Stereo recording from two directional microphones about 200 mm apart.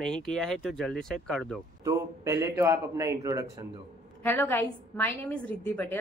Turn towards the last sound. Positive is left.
turn(degrees=10)  # may be behind; listen again after turning